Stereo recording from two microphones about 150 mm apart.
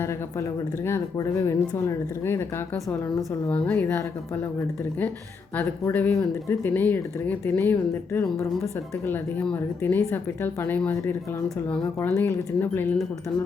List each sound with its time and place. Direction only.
0.0 s a woman's voice: 20° left (ahead or behind)
5.5 s a woman's voice: 10° left (ahead or behind)